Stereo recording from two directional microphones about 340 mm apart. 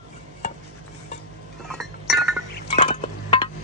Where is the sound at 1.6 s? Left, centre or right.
Centre.